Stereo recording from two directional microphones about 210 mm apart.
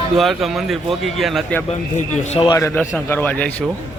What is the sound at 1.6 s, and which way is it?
Speech, 30° left (ahead or behind).